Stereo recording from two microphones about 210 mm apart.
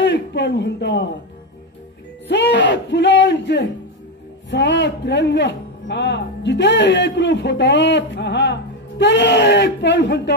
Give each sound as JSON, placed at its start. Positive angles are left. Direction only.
{"t": 0.0, "sound": "a man's voice", "side_deg": 55}
{"t": 2.2, "sound": "speech", "side_deg": 55}